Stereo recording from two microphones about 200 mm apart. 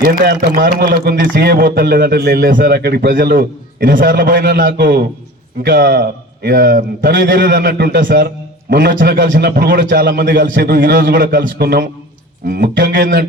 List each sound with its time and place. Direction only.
0.1 s a man's voice: 50° right (ahead or behind)